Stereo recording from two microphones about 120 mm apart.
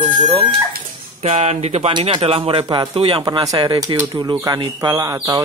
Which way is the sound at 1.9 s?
40° right (ahead or behind).